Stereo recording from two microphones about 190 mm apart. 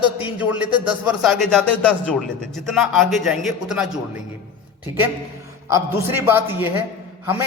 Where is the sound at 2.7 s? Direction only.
Centre (ahead or behind).